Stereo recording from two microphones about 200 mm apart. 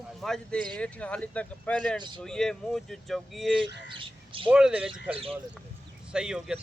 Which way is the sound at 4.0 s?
25° right (ahead or behind).